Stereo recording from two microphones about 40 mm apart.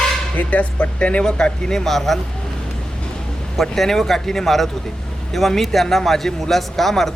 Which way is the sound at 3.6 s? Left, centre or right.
Centre.